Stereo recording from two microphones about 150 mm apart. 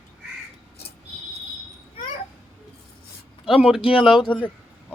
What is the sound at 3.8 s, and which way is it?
Speech, 35° left (ahead or behind).